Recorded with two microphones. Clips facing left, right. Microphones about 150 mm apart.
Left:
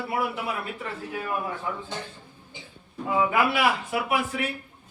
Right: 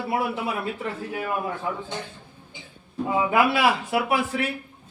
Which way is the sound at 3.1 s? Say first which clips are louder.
Right 2 dB; 25° right (ahead or behind).